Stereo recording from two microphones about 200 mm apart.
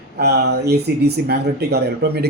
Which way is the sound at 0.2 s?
55° right (ahead or behind).